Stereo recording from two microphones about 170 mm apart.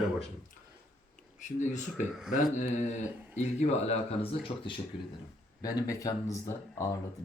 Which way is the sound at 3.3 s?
40° left (ahead or behind).